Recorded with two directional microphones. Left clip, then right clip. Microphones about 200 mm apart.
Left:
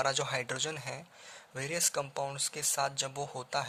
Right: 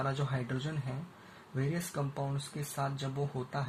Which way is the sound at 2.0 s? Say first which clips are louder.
Left 4 dB; 65° left (ahead or behind).